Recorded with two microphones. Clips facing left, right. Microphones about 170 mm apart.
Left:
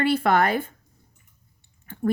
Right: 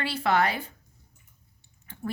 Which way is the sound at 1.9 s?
50° left (ahead or behind).